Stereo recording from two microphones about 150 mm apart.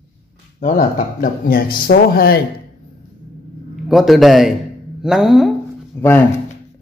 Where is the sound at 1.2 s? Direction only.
70° left (ahead or behind); by 2.4 s 85° left.